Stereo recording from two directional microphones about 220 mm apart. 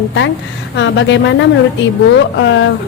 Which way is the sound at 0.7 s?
55° left (ahead or behind).